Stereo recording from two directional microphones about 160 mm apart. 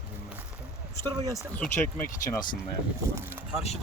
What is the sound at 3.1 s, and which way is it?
Speech, 15° right (ahead or behind).